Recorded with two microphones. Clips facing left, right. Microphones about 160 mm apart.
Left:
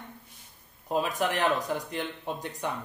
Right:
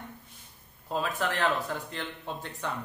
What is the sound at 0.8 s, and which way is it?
Speech, 15° left (ahead or behind).